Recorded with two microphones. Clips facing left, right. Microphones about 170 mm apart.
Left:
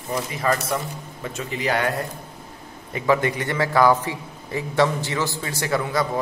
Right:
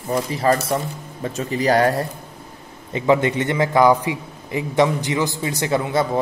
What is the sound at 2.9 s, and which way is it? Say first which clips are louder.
A man's voice: right 3 dB; 25° right (ahead or behind).